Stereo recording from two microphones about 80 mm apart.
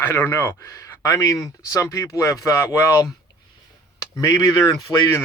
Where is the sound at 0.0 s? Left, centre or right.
Left.